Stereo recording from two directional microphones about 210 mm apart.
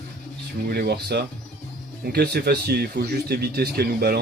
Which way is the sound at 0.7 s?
50° right (ahead or behind).